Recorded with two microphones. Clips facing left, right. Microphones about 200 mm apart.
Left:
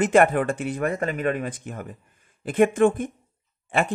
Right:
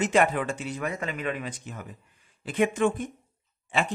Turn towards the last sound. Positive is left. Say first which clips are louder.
# left 4 dB
turn(degrees=55)  # may be behind; listen again after turning